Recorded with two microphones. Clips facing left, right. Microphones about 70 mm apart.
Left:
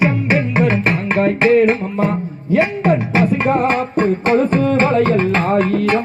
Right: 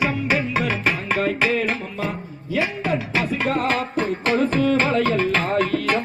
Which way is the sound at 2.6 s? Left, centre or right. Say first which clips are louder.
Left 7 dB; left.